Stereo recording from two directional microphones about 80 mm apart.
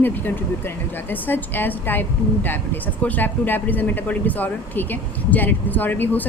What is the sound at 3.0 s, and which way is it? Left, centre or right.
Speech, left.